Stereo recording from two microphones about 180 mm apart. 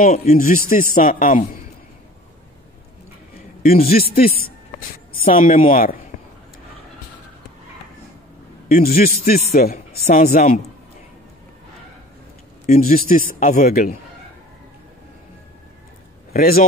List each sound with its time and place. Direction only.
0.0 s a man's voice: 45° left (ahead or behind)
3.9 s a man's voice: 55° left (ahead or behind)
8.6 s a man's voice: 55° left (ahead or behind)
10.0 s a man's voice: 40° left (ahead or behind)
12.6 s a man's voice: 45° left (ahead or behind)
16.3 s a man's voice: 55° left (ahead or behind)